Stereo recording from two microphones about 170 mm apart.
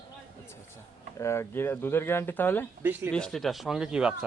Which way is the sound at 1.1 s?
15° left (ahead or behind).